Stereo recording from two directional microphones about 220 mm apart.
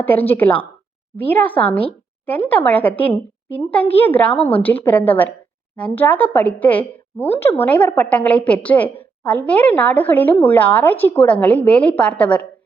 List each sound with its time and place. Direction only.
0.0 s a woman's voice: 10° left (ahead or behind)